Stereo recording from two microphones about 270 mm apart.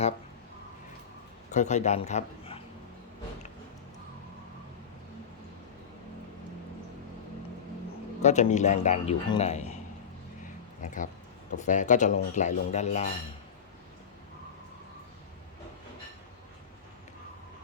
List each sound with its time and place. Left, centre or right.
1.5 s a man's voice: left
8.2 s speech: left
10.8 s speech: left